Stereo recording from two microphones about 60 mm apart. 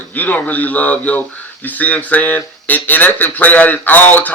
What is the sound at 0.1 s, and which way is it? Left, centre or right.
A man's voice, left.